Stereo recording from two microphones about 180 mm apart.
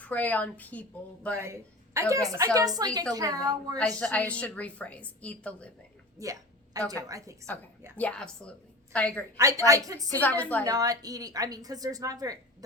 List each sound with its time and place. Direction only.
0.0 s a woman's voice: 10° left (ahead or behind)
1.4 s a woman's voice: 15° right (ahead or behind)
4.0 s a woman's voice: 10° left (ahead or behind)
6.2 s a woman's voice: 20° right (ahead or behind)
7.9 s a woman's voice: 5° left (ahead or behind)
9.4 s a woman's voice: 20° right (ahead or behind)
10.1 s a woman's voice: 10° left (ahead or behind)
10.6 s a woman's voice: 20° right (ahead or behind)